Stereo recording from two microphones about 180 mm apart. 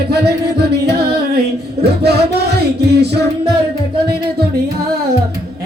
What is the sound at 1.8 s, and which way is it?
Music, 65° right (ahead or behind).